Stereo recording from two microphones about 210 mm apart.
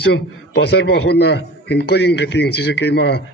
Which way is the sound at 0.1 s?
50° left (ahead or behind).